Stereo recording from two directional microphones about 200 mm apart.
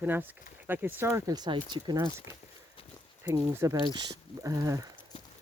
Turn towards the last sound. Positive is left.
turn(degrees=-15)  # may be behind; listen again after turning